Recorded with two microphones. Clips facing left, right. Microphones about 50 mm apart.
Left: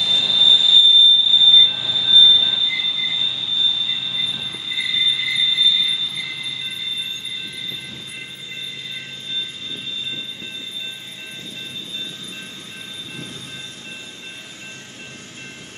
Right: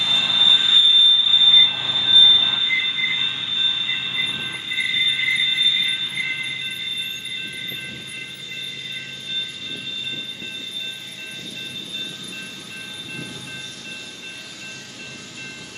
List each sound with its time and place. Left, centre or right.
0.0 s train: right